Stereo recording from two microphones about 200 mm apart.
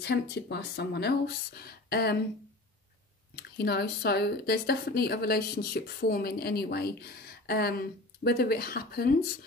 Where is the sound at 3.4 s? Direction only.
55° left (ahead or behind).